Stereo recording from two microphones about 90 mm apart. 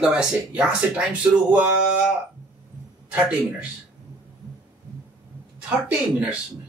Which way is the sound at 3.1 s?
15° right (ahead or behind).